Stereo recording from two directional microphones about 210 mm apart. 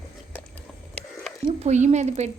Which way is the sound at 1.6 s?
35° right (ahead or behind).